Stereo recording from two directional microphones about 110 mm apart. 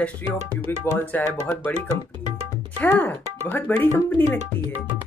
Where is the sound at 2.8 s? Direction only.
15° left (ahead or behind).